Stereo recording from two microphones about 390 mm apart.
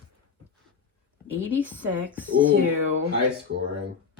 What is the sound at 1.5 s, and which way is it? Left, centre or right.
Speech, centre.